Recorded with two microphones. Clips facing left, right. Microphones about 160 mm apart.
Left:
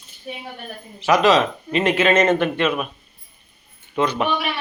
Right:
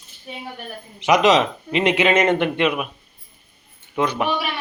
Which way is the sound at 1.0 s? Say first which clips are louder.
Even; 20° right (ahead or behind).